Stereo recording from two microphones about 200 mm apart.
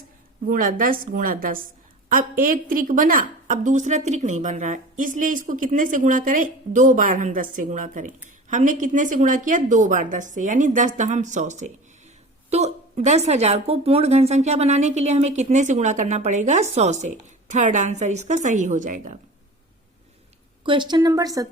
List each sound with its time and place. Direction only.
0.4 s a woman's voice: 45° right (ahead or behind)
20.7 s a woman's voice: 20° right (ahead or behind)